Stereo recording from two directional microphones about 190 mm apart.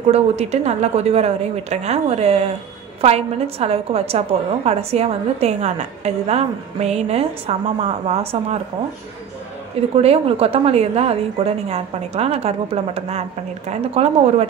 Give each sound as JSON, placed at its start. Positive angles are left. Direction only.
{"t": 0.1, "sound": "a woman's voice", "side_deg": -35}
{"t": 9.9, "sound": "a woman's voice", "side_deg": -30}